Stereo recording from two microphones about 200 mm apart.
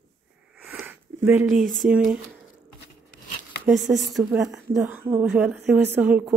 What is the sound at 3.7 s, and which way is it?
A woman's voice, centre (ahead or behind).